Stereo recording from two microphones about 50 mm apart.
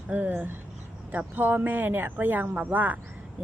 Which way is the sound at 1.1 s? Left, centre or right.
Right.